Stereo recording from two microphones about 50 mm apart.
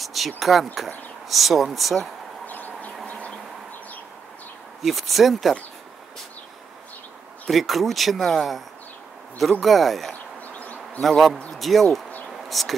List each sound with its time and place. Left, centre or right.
0.0 s speech: centre
2.4 s chicken: left
4.8 s speech: centre
7.4 s speech: centre
12.3 s a sound: centre